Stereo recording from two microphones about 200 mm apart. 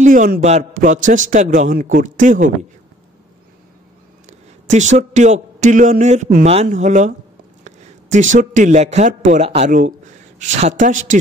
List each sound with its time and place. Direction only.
0.0 s a man's voice: 40° right (ahead or behind)
4.3 s a man's voice: 35° right (ahead or behind)